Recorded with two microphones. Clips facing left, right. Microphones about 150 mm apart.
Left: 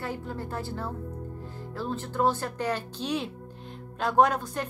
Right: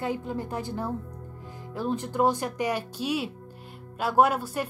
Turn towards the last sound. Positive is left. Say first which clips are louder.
# right 1 dB
turn(degrees=-10)  # may be behind; listen again after turning